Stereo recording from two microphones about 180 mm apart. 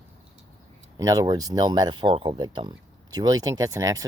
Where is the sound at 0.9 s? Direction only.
20° right (ahead or behind).